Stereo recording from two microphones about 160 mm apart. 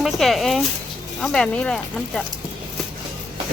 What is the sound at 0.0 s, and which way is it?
Speech, centre (ahead or behind).